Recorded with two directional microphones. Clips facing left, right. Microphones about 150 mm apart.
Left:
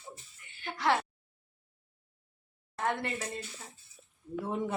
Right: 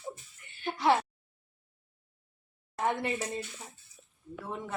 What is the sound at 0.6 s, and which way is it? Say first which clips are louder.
Speech: right 3 dB; 15° right (ahead or behind).